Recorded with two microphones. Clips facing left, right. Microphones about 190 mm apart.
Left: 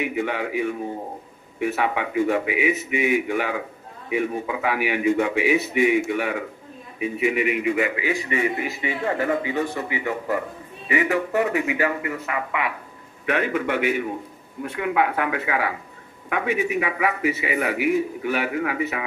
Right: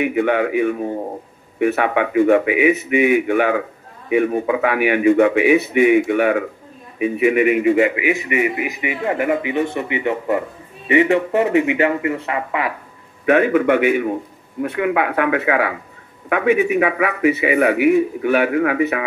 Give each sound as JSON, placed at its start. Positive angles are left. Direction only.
{"t": 0.0, "sound": "a man's voice", "side_deg": -60}
{"t": 7.7, "sound": "a man's voice", "side_deg": -20}
{"t": 13.3, "sound": "a man's voice", "side_deg": -50}